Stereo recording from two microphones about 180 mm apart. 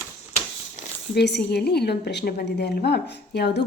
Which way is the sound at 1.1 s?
65° left (ahead or behind).